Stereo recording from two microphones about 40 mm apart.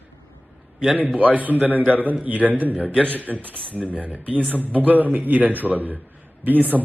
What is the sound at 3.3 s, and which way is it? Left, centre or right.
Speech, right.